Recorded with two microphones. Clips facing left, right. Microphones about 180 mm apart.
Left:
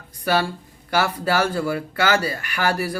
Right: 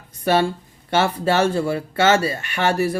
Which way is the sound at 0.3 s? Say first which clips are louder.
Right 3 dB; 25° right (ahead or behind).